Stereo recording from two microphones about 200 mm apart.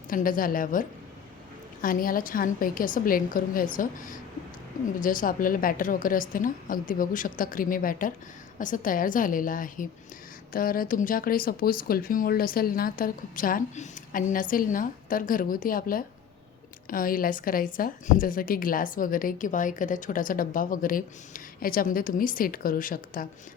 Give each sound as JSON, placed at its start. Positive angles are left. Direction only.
{"t": 0.1, "sound": "a woman's voice", "side_deg": 45}